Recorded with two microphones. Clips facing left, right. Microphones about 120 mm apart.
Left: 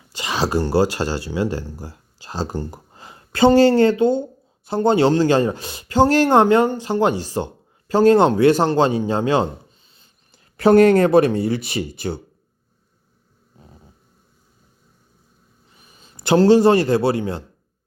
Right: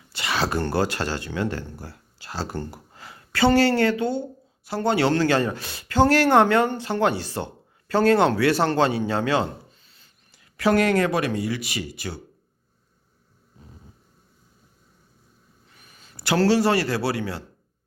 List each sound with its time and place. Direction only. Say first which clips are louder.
0.1 s speech: left 4 dB; 15° left (ahead or behind)
15.7 s a man's voice: left 2 dB; 25° left (ahead or behind)